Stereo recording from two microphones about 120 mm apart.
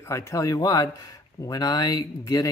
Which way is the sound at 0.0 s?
25° left (ahead or behind).